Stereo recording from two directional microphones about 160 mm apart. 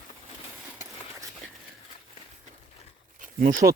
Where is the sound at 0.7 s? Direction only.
15° right (ahead or behind).